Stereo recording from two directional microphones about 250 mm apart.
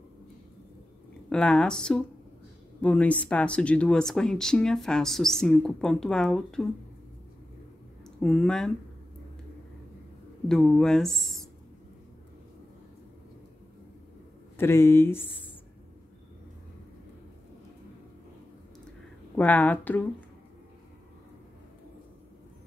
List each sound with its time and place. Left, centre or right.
1.3 s speech: centre
8.2 s speech: centre
10.5 s speech: centre
14.6 s speech: centre
19.3 s speech: centre